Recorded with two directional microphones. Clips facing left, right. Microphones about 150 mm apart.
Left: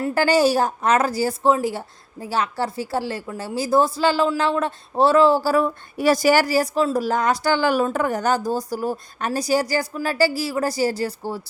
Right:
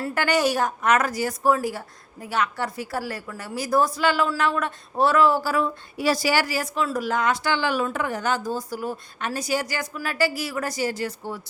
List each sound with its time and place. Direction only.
0.1 s a woman's voice: 30° left (ahead or behind)
5.6 s speech: 50° left (ahead or behind); by 11.4 s 35° left (ahead or behind)